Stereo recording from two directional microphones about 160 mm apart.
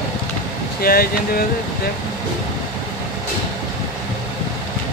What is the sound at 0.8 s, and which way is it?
Speech, 65° left (ahead or behind).